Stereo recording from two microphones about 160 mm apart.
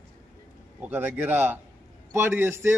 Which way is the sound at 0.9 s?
10° right (ahead or behind).